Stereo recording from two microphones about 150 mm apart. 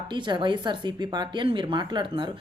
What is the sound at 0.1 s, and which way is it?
A woman's voice, 30° right (ahead or behind).